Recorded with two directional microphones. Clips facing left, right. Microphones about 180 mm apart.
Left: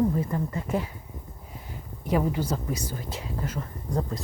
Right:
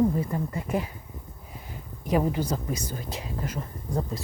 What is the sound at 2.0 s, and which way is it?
Speech, 15° right (ahead or behind).